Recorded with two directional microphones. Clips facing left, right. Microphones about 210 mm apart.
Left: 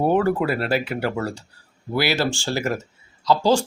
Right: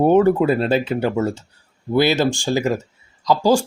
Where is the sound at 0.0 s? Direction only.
20° right (ahead or behind).